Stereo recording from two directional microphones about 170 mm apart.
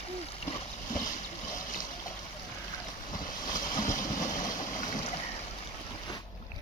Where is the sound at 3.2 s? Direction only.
25° left (ahead or behind).